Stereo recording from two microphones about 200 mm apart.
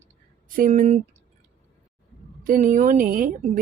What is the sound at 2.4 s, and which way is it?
Speech, 40° right (ahead or behind).